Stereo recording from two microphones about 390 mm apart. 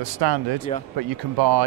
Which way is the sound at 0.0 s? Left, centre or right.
Right.